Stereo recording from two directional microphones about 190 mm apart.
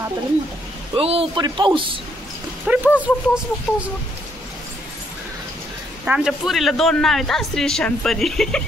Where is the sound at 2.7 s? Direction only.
10° right (ahead or behind).